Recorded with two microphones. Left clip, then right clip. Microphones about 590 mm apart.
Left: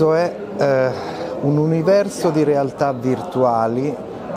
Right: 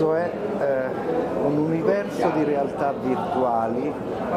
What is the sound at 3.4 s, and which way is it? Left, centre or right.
Speech, left.